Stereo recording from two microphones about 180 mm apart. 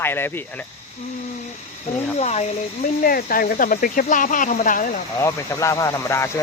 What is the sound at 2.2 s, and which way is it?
Speech, 40° left (ahead or behind).